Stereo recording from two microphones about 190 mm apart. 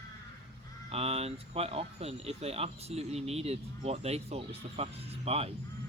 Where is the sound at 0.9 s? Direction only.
35° right (ahead or behind).